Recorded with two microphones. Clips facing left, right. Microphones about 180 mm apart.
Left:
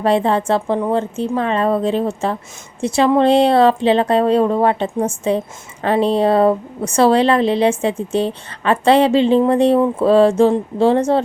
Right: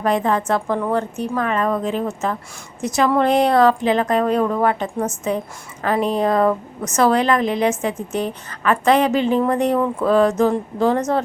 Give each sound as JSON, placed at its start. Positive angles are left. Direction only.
{"t": 0.0, "sound": "a woman's voice", "side_deg": 30}